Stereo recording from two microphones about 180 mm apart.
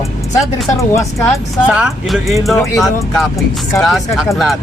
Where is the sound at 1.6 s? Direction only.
5° right (ahead or behind).